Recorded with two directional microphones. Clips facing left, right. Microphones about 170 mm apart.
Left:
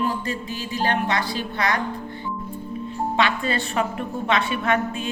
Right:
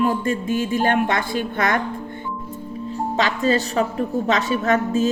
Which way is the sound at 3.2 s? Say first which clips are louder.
Right 4 dB; 40° right (ahead or behind).